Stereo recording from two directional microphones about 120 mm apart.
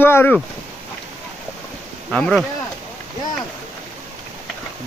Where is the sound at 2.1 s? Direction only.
Centre (ahead or behind).